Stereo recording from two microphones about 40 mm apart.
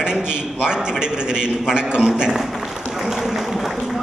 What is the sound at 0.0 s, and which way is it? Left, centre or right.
A man's voice, right.